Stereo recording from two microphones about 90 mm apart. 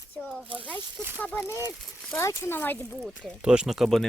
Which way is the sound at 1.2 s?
15° left (ahead or behind).